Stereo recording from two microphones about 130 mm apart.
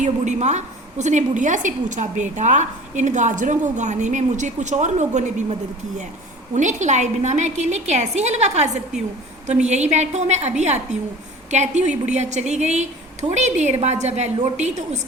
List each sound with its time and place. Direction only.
0.0 s a woman's voice: 65° right (ahead or behind)
11.5 s a woman's voice: 65° right (ahead or behind)